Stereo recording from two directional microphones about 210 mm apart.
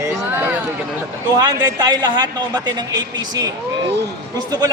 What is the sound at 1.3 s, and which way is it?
A man's voice, 20° right (ahead or behind).